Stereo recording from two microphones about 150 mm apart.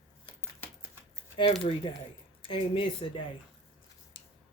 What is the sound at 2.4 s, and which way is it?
Speech, 35° left (ahead or behind).